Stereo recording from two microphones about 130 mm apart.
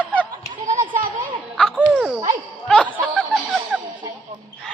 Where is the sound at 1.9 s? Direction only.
10° right (ahead or behind).